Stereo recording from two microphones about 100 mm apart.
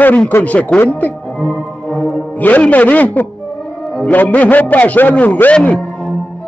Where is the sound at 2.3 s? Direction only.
15° left (ahead or behind).